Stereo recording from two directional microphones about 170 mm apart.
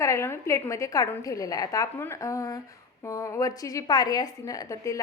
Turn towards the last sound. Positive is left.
turn(degrees=20)  # may be behind; listen again after turning